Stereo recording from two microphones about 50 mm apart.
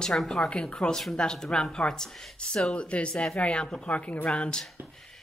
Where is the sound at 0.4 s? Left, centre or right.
Centre.